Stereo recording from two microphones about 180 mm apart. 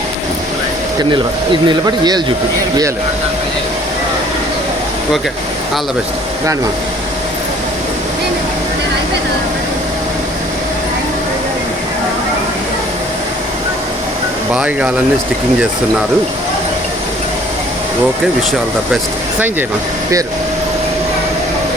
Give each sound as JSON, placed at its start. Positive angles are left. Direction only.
{"t": 1.6, "sound": "speech", "side_deg": -25}
{"t": 14.5, "sound": "speech", "side_deg": -5}